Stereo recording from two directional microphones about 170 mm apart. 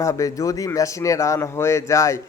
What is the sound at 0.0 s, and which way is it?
A man's voice, 20° left (ahead or behind).